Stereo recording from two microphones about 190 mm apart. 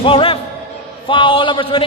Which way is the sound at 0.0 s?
30° left (ahead or behind).